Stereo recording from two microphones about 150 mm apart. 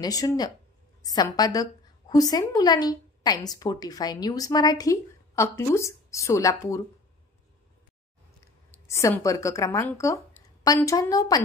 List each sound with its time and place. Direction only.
0.0 s a woman's voice: 25° left (ahead or behind)
8.8 s a woman's voice: 20° left (ahead or behind)